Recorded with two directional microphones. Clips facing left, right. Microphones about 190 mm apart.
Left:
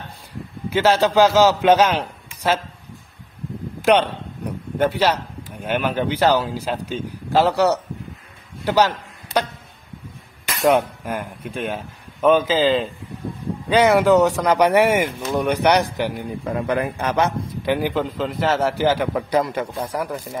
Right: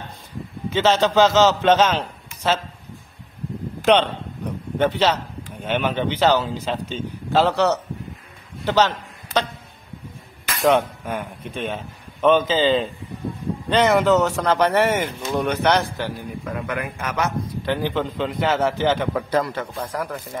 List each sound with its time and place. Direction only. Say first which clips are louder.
0.7 s a man's voice: left 1 dB; 10° left (ahead or behind)
3.8 s speech: left 1 dB; 10° left (ahead or behind)
8.6 s a sound: left 1 dB; 10° left (ahead or behind)
10.6 s a man's voice: left 1 dB; 10° left (ahead or behind)
16.4 s a man's voice: left 6 dB; 30° left (ahead or behind)
17.6 s a man's voice: left 3 dB; 10° left (ahead or behind)